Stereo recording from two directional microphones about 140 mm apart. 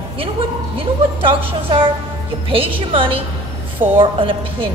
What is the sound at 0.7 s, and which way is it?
A man's voice, 40° right (ahead or behind).